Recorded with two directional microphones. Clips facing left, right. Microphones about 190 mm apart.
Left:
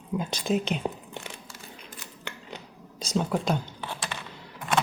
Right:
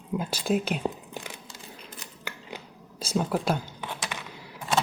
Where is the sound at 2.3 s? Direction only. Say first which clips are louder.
Right 1 dB; 5° right (ahead or behind).